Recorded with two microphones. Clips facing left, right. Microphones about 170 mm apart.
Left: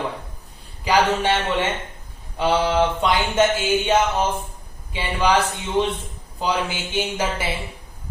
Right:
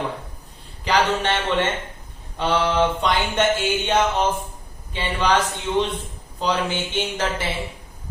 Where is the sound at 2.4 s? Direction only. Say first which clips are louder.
Left 2 dB; 10° left (ahead or behind).